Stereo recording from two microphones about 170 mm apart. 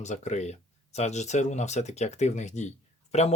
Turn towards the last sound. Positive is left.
turn(degrees=40)  # may be behind; listen again after turning